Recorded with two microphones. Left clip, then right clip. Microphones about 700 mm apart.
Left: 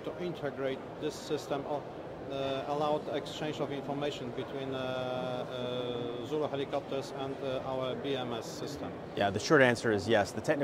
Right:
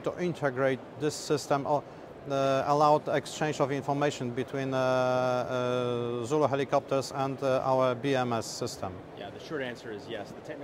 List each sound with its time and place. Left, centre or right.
0.2 s a man's voice: right
9.2 s speech: left